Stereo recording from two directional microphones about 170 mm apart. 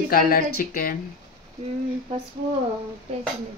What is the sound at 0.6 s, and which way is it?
Speech, 55° left (ahead or behind).